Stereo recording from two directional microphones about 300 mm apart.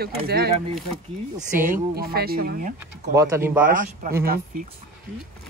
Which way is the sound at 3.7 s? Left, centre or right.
Right.